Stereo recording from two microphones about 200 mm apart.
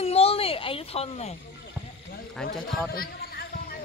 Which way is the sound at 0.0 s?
30° left (ahead or behind).